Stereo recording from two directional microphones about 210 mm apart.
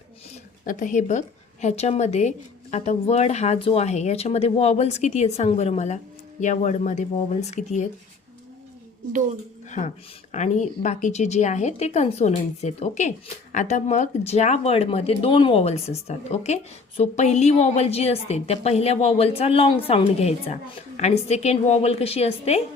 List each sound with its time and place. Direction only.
0.6 s speech: 40° left (ahead or behind)
9.6 s a woman's voice: 35° left (ahead or behind)